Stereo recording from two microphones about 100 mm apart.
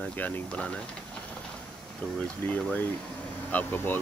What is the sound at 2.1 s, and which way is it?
Speech, 15° left (ahead or behind).